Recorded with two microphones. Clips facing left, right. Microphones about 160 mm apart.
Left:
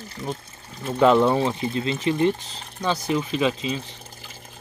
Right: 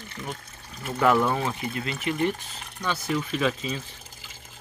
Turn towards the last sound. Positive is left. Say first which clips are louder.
# left 3 dB
turn(degrees=20)  # may be behind; listen again after turning